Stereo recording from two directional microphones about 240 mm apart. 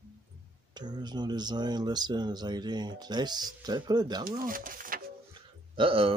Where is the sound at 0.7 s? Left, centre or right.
Centre.